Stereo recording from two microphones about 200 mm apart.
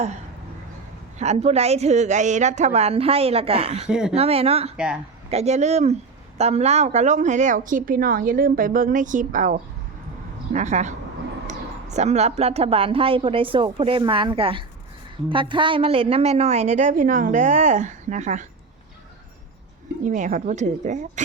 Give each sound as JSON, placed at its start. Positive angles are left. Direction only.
{"t": 1.2, "sound": "speech", "side_deg": -35}
{"t": 3.8, "sound": "speech", "side_deg": -5}
{"t": 4.1, "sound": "a woman's voice", "side_deg": -30}
{"t": 20.1, "sound": "speech", "side_deg": -40}